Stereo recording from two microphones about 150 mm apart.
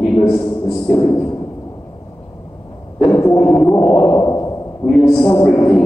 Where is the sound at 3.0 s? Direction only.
15° left (ahead or behind).